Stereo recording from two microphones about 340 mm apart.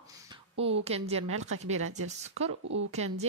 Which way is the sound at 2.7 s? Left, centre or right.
Right.